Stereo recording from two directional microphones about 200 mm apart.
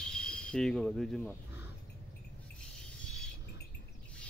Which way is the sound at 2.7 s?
5° left (ahead or behind).